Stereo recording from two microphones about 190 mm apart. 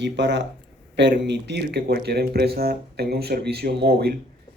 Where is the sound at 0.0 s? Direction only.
65° right (ahead or behind).